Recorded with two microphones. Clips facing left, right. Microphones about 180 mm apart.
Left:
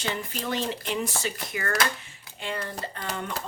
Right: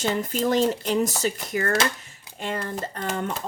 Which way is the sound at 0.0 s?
40° right (ahead or behind).